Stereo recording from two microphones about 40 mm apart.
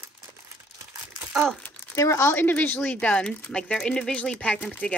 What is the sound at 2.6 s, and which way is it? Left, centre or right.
Speech, left.